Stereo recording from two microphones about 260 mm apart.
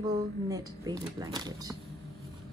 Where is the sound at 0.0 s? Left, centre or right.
Centre.